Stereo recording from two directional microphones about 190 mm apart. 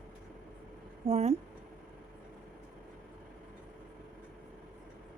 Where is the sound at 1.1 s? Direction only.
30° right (ahead or behind).